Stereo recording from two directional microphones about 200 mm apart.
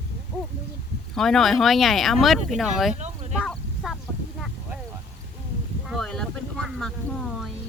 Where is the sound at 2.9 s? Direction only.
35° right (ahead or behind).